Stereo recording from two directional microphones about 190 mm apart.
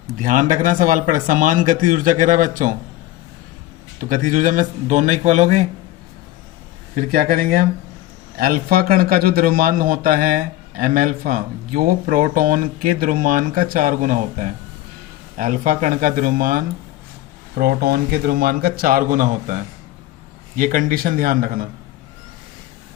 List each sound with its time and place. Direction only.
0.2 s a man's voice: 45° right (ahead or behind)
3.9 s speech: 45° right (ahead or behind)
6.9 s a man's voice: 50° right (ahead or behind)